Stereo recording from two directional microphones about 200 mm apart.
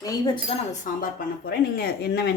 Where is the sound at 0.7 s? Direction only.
45° left (ahead or behind).